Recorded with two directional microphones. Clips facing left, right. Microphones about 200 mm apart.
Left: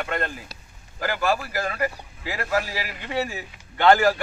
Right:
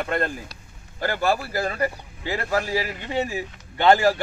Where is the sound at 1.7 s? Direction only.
30° right (ahead or behind).